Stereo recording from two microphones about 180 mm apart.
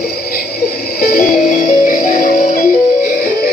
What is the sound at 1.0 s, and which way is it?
Music, 50° left (ahead or behind).